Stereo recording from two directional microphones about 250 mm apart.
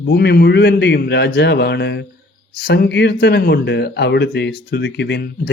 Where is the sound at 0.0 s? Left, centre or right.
Left.